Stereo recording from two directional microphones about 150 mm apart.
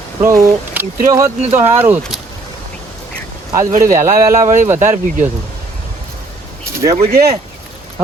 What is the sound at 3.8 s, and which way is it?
Speech, 20° right (ahead or behind).